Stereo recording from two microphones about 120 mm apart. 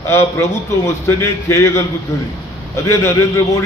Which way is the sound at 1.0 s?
20° left (ahead or behind).